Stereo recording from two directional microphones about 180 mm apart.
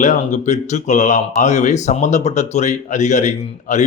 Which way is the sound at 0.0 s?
40° left (ahead or behind).